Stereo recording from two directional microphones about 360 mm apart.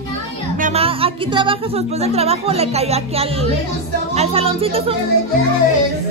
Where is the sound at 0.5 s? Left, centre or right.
Centre.